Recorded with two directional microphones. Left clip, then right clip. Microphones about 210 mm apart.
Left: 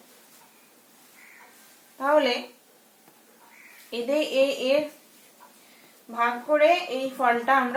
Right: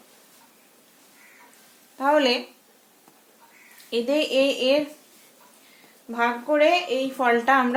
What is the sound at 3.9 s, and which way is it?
Speech, 45° right (ahead or behind).